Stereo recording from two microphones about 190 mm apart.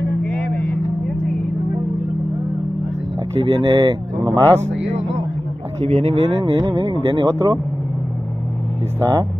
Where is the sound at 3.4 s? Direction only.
25° right (ahead or behind).